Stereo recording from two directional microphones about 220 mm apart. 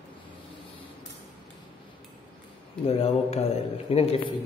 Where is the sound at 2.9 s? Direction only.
25° left (ahead or behind).